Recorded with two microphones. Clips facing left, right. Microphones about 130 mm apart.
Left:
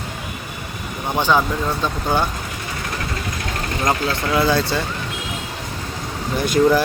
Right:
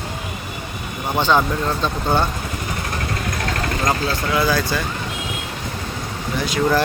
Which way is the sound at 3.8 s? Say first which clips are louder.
Left 2 dB; 25° left (ahead or behind).